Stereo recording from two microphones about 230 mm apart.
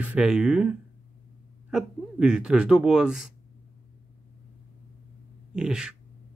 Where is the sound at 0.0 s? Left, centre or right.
Centre.